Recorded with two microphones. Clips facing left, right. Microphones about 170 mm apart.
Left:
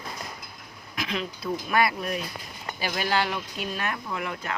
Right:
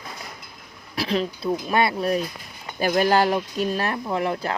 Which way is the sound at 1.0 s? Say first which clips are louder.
Right 7 dB; 35° right (ahead or behind).